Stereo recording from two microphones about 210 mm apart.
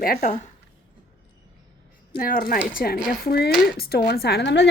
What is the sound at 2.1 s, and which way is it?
A woman's voice, 40° left (ahead or behind).